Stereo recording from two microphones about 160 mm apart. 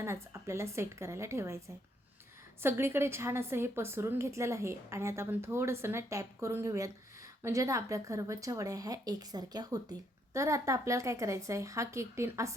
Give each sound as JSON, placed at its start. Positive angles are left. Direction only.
{"t": 0.0, "sound": "a woman's voice", "side_deg": -20}
{"t": 2.6, "sound": "a woman's voice", "side_deg": -15}